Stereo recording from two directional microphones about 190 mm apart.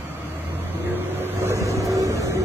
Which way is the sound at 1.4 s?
15° right (ahead or behind).